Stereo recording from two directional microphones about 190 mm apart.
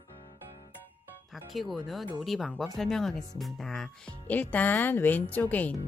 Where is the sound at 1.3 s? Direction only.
Centre (ahead or behind).